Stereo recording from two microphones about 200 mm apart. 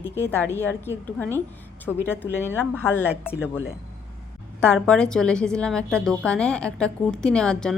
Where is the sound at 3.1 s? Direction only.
5° right (ahead or behind).